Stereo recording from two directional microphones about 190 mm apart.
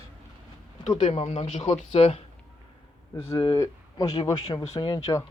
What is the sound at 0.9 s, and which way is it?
Speech, 35° left (ahead or behind).